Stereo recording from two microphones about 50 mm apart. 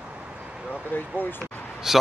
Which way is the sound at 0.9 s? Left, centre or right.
Left.